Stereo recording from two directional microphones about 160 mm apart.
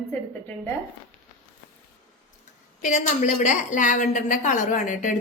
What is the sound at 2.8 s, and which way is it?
A woman's voice, 50° left (ahead or behind).